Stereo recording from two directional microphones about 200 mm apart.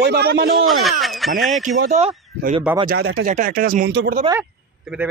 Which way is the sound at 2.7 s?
10° right (ahead or behind).